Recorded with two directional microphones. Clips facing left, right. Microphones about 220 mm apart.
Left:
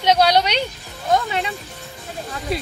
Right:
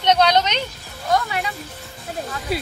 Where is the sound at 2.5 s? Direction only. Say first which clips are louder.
Even; 5° right (ahead or behind).